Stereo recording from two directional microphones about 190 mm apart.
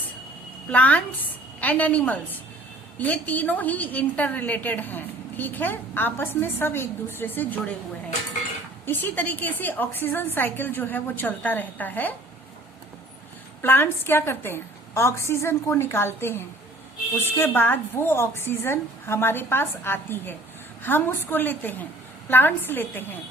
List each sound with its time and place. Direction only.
0.7 s a woman's voice: 10° left (ahead or behind)
8.9 s a woman's voice: 10° left (ahead or behind)
13.6 s a woman's voice: 10° left (ahead or behind)